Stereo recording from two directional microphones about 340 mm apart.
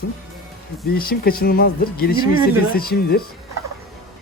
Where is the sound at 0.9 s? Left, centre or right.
Left.